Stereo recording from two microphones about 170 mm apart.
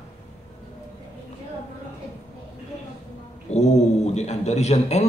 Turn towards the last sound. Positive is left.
turn(degrees=40)  # may be behind; listen again after turning